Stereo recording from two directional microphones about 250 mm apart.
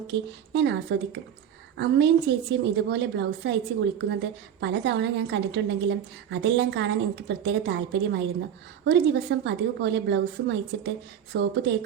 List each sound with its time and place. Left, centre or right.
0.1 s a woman's voice: right